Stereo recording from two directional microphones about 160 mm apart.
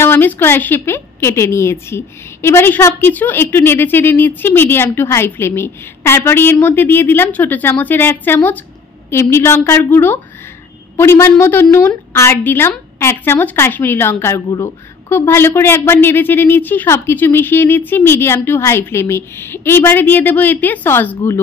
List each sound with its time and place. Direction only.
0.0 s a woman's voice: 10° left (ahead or behind)